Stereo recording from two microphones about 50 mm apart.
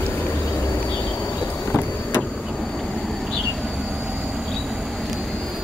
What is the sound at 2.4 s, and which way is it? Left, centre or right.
Vehicle, centre.